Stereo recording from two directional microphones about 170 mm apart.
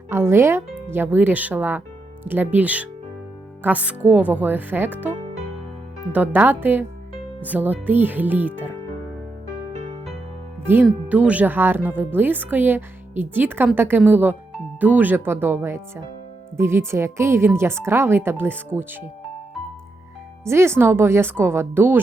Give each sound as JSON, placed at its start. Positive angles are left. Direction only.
{"t": 0.1, "sound": "speech", "side_deg": -15}
{"t": 9.7, "sound": "music", "side_deg": -45}
{"t": 10.8, "sound": "speech", "side_deg": -10}
{"t": 20.4, "sound": "speech", "side_deg": -15}